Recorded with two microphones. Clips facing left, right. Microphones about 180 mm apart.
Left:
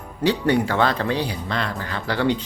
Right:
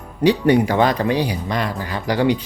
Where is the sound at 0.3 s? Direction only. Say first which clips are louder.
Right 5 dB; 15° right (ahead or behind).